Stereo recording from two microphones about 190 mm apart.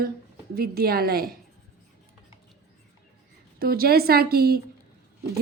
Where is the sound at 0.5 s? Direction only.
55° right (ahead or behind).